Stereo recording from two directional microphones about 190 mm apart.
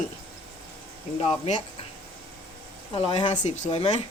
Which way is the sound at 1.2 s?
35° left (ahead or behind).